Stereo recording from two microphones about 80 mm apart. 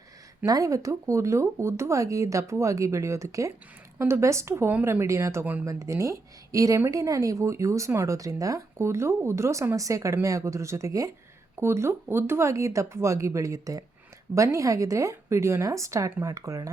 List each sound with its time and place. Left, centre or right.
0.4 s a woman's voice: right